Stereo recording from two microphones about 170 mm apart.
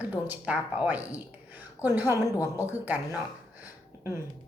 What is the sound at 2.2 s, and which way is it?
Speech, 20° left (ahead or behind).